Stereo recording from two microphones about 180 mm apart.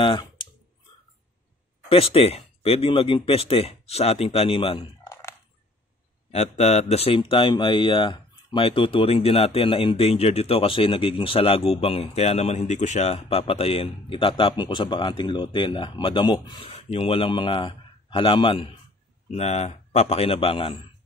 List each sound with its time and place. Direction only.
0.0 s clicking: 25° left (ahead or behind)
1.9 s speech: 30° left (ahead or behind)
6.3 s speech: 40° left (ahead or behind)